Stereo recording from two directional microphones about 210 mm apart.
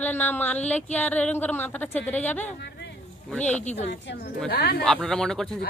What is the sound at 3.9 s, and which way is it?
Speech, 50° left (ahead or behind).